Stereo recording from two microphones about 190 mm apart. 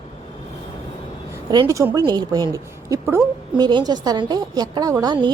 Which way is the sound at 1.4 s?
20° right (ahead or behind).